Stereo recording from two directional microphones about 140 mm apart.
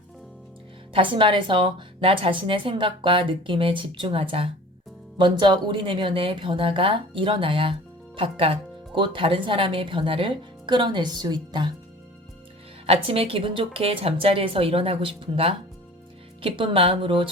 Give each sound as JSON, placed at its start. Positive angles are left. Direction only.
{"t": 0.9, "sound": "a woman's voice", "side_deg": -35}
{"t": 12.8, "sound": "a woman's voice", "side_deg": -45}